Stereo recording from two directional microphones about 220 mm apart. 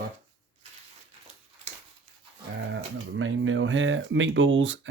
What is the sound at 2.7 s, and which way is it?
Speech, 60° right (ahead or behind).